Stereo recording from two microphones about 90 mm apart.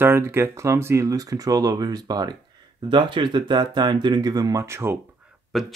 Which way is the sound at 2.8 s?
65° right (ahead or behind).